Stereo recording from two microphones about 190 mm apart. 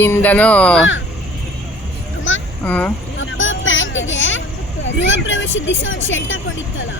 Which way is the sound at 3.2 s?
85° left.